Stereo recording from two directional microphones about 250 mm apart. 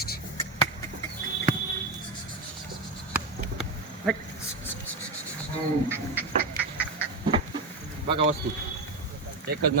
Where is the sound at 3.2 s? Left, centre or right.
Centre.